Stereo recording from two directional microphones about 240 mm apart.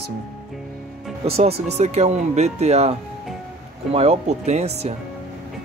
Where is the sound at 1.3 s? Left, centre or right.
Right.